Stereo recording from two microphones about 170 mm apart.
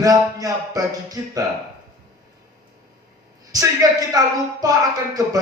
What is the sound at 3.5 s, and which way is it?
Speech, 20° right (ahead or behind).